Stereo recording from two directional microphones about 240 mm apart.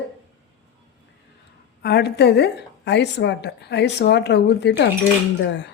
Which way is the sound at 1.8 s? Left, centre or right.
Left.